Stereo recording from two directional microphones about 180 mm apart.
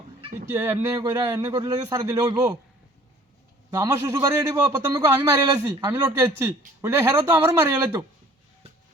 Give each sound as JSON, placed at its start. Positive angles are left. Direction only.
{"t": 0.2, "sound": "a sound", "side_deg": -35}
{"t": 0.5, "sound": "speech", "side_deg": -15}
{"t": 3.7, "sound": "a man's voice", "side_deg": -20}